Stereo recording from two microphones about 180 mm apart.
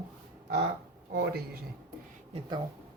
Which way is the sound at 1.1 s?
65° right (ahead or behind).